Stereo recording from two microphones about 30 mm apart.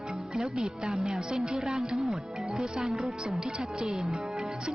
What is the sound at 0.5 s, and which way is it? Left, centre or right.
Speech, right.